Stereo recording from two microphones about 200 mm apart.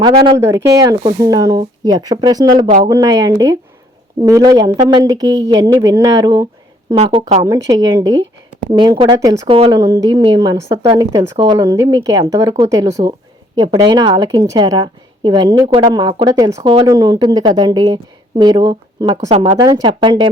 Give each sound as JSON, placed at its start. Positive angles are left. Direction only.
{"t": 0.0, "sound": "a woman's voice", "side_deg": -25}
{"t": 0.3, "sound": "a woman's voice", "side_deg": -15}
{"t": 6.9, "sound": "speech", "side_deg": -30}
{"t": 7.4, "sound": "a woman's voice", "side_deg": -15}